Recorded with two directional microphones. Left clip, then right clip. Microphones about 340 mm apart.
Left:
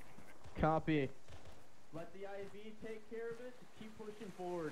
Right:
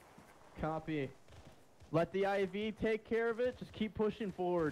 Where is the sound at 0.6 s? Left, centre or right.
Centre.